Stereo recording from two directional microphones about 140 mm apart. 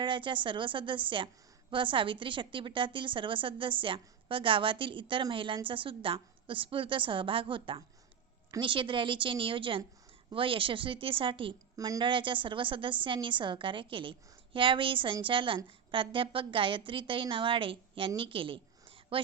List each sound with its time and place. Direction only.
0.0 s a woman's voice: 35° right (ahead or behind)